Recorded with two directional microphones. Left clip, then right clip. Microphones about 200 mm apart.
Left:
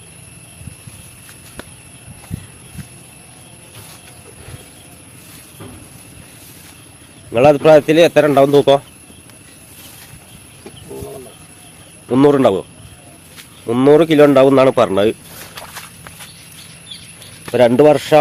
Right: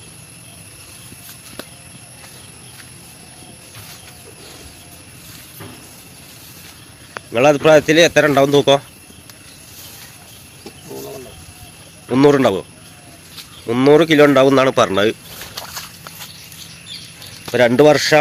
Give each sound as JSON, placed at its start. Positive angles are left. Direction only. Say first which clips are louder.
{"t": 7.3, "sound": "a man's voice", "louder": "left 2 dB", "side_deg": 0}
{"t": 12.0, "sound": "a man's voice", "louder": "left 1 dB", "side_deg": 0}
{"t": 13.7, "sound": "a man's voice", "louder": "left 1 dB", "side_deg": 0}
{"t": 15.5, "sound": "walk", "louder": "right 2 dB", "side_deg": 15}
{"t": 17.4, "sound": "speech", "louder": "left 1 dB", "side_deg": 0}